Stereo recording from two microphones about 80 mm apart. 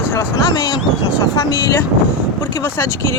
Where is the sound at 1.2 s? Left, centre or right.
Left.